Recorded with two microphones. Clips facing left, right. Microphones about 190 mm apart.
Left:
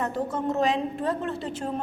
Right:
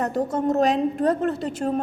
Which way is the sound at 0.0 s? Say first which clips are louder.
Right 5 dB; 40° right (ahead or behind).